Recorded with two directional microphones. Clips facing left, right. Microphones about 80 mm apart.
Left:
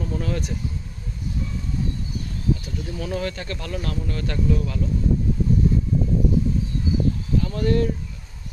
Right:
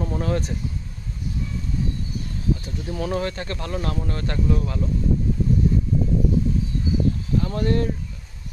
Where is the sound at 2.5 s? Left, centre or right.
Right.